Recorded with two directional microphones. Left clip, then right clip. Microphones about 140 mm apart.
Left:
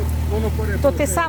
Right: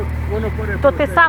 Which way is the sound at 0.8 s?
15° left (ahead or behind).